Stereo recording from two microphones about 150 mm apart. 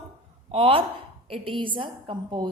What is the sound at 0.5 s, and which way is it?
A woman's voice, 40° right (ahead or behind).